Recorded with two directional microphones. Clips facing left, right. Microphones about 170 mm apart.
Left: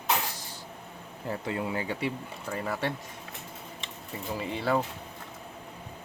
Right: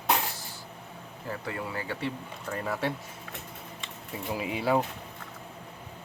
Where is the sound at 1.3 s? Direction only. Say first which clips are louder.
Left 3 dB; 20° left (ahead or behind).